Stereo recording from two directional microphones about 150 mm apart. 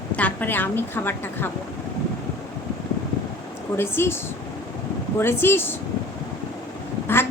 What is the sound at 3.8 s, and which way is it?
Speech, 15° left (ahead or behind).